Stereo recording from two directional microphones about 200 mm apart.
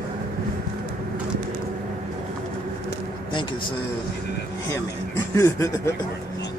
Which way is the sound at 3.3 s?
25° left (ahead or behind).